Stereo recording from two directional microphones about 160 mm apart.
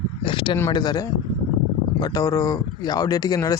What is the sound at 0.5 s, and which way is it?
Speech, 20° left (ahead or behind).